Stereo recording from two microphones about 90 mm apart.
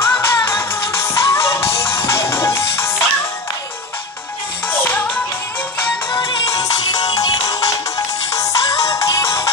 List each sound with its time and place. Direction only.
0.0 s music: 25° left (ahead or behind)
4.6 s music: 20° left (ahead or behind)
6.2 s music: 40° left (ahead or behind)